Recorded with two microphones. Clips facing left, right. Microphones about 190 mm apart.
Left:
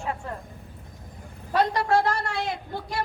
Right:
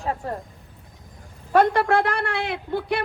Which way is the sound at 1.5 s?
55° right (ahead or behind).